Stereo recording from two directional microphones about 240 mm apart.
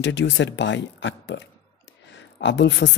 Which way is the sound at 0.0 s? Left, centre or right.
Left.